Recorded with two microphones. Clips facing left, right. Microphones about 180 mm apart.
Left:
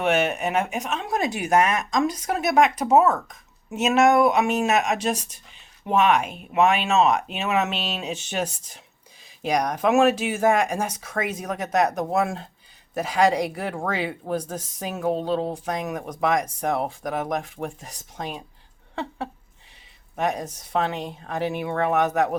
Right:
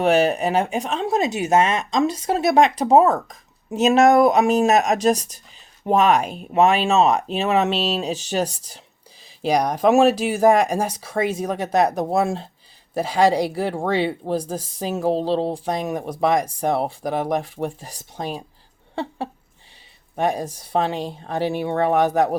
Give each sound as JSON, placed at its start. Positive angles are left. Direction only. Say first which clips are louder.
{"t": 0.0, "sound": "speech", "louder": "right 5 dB", "side_deg": -35}
{"t": 20.1, "sound": "speech", "louder": "right 4 dB", "side_deg": -30}